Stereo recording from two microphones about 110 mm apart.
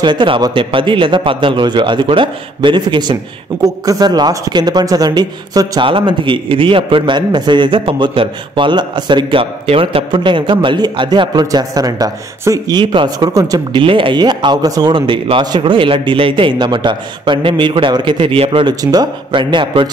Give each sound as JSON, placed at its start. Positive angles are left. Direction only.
{"t": 0.0, "sound": "a man's voice", "side_deg": -45}
{"t": 5.9, "sound": "a man's voice", "side_deg": -50}
{"t": 10.1, "sound": "speech", "side_deg": -45}
{"t": 13.7, "sound": "a man's voice", "side_deg": -50}
{"t": 18.7, "sound": "a man's voice", "side_deg": -35}